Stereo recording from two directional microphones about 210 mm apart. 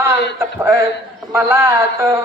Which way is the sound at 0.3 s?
10° right (ahead or behind).